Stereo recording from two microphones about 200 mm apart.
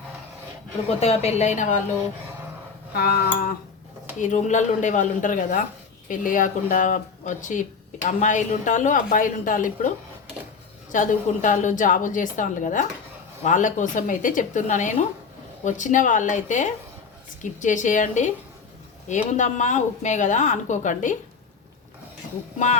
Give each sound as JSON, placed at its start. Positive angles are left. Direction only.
{"t": 0.9, "sound": "speech", "side_deg": 30}
{"t": 2.9, "sound": "cutlery", "side_deg": 50}
{"t": 4.2, "sound": "speech", "side_deg": 35}
{"t": 10.9, "sound": "speech", "side_deg": 40}
{"t": 22.5, "sound": "speech", "side_deg": 35}